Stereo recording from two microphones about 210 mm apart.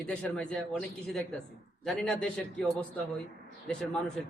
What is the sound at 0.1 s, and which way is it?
A man's voice, 5° left (ahead or behind).